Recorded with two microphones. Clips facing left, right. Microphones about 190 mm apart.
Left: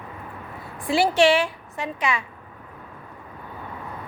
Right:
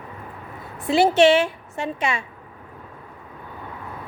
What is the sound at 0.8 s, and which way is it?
A woman's voice, 25° right (ahead or behind).